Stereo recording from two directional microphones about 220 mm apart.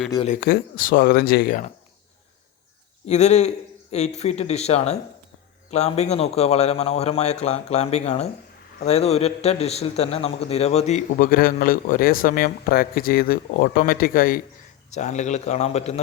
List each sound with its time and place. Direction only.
0.3 s speech: 40° left (ahead or behind)
3.1 s a man's voice: 30° left (ahead or behind)